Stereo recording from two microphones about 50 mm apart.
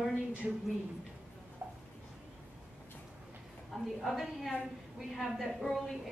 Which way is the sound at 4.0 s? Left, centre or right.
Centre.